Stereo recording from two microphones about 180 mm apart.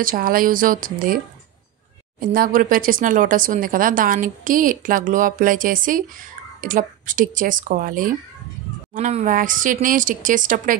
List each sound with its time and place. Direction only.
0.0 s speech: 50° right (ahead or behind)